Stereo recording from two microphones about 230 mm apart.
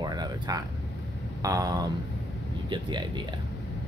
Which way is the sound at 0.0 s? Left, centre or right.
Centre.